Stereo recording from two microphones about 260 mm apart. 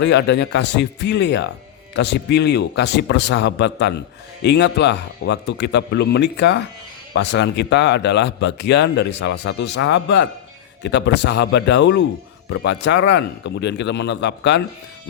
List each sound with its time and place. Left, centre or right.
0.0 s a man's voice: left